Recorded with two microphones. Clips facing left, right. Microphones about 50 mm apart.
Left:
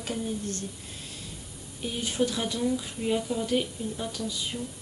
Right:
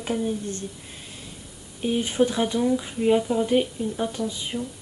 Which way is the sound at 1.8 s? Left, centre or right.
Right.